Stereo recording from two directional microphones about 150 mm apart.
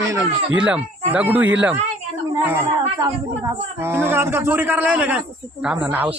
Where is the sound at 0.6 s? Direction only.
10° right (ahead or behind).